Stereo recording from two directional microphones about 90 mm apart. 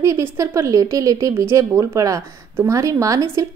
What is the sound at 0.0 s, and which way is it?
A woman's voice, 35° right (ahead or behind).